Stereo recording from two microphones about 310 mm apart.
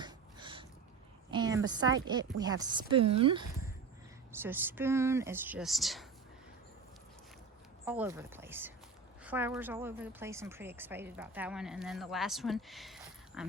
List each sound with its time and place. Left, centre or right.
0.0 s a sound: centre
2.0 s speech: centre
7.9 s a woman's voice: centre